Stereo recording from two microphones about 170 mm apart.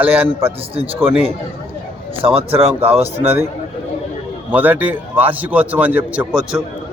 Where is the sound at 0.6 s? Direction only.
35° right (ahead or behind).